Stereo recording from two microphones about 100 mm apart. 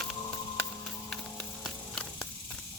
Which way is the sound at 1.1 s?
5° left (ahead or behind).